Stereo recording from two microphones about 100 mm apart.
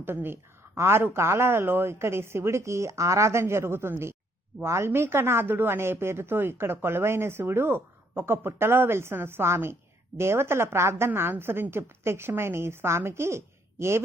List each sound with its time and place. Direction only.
0.0 s speech: 20° right (ahead or behind)